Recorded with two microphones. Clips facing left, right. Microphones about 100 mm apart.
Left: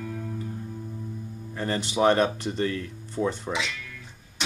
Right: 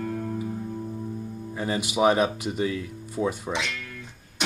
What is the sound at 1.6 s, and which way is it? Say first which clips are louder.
Speech: right 1 dB; 10° right (ahead or behind).